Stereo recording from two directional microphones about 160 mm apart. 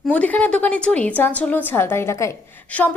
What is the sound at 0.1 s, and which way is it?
A woman's voice, 10° left (ahead or behind).